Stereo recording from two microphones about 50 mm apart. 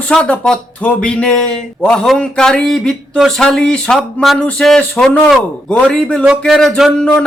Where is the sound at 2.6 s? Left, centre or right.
Centre.